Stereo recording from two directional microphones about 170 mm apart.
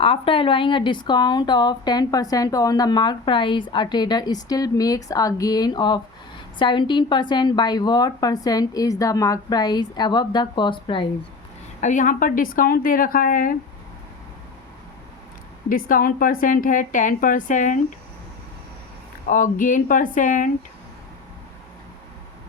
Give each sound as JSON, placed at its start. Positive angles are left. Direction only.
{"t": 0.0, "sound": "a woman's voice", "side_deg": 30}
{"t": 11.8, "sound": "a woman's voice", "side_deg": 45}
{"t": 15.7, "sound": "a woman's voice", "side_deg": 55}
{"t": 19.3, "sound": "a woman's voice", "side_deg": 50}